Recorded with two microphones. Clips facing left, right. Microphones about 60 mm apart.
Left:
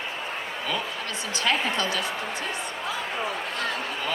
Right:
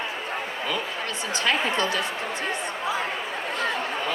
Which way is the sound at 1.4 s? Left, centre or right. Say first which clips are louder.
Right 1 dB; right.